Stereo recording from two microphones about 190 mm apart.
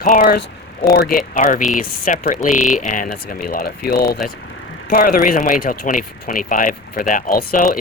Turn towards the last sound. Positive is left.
turn(degrees=45)  # may be behind; listen again after turning